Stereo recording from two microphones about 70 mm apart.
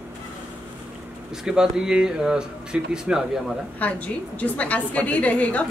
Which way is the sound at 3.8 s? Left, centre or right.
Left.